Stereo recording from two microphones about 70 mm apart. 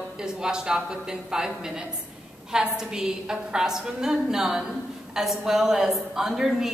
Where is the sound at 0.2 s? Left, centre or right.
Centre.